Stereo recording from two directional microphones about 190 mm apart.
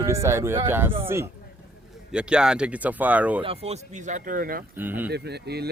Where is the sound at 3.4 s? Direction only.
30° right (ahead or behind); by 4.6 s 45° right (ahead or behind).